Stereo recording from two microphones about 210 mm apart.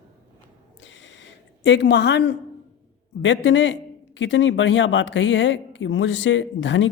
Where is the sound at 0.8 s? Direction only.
60° left (ahead or behind).